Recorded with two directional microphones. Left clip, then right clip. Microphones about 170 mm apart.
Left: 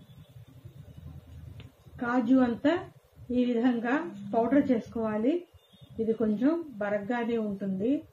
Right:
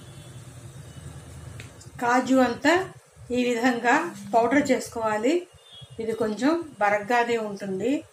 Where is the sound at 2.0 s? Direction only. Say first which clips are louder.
Right 6 dB; 30° left (ahead or behind).